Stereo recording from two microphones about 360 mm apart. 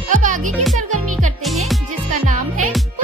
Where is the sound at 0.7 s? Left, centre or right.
Centre.